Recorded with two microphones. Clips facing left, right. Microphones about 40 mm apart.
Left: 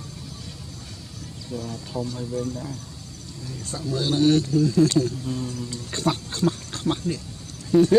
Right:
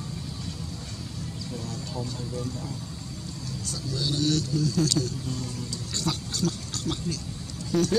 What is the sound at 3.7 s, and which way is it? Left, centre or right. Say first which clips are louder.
A man's voice: left 6 dB; left.